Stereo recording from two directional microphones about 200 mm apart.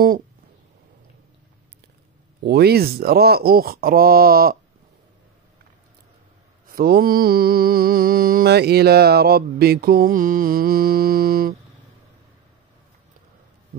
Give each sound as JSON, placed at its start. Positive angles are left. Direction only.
{"t": 2.4, "sound": "mantra", "side_deg": -50}
{"t": 6.7, "sound": "mantra", "side_deg": -45}